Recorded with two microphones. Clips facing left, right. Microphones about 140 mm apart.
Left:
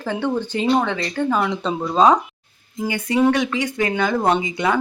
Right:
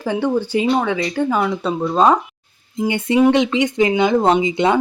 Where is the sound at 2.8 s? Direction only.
25° right (ahead or behind).